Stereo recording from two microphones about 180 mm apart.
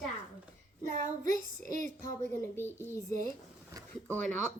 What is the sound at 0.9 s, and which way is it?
Child singing, 45° right (ahead or behind).